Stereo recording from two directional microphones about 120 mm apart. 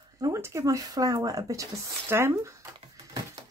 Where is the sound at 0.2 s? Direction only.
25° right (ahead or behind).